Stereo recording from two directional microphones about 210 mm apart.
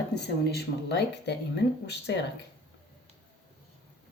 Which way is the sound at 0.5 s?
50° left (ahead or behind).